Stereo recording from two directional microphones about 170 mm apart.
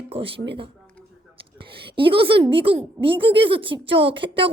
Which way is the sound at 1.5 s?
30° right (ahead or behind).